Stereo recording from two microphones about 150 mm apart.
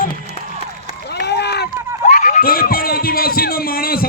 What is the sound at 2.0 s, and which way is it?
Speech, 60° left (ahead or behind).